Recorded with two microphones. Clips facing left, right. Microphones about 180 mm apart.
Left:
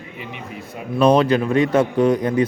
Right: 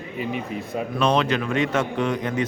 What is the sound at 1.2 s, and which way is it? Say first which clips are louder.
A man's voice: left 6 dB; 35° left (ahead or behind).